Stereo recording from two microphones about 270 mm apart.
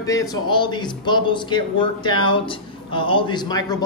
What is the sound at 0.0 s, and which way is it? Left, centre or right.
A man's voice, centre.